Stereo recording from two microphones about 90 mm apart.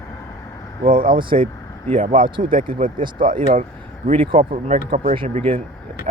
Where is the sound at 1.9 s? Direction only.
80° right.